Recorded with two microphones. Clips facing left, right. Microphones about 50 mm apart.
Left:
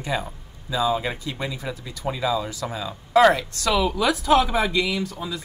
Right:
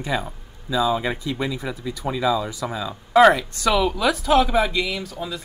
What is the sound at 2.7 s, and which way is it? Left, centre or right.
Speech, centre.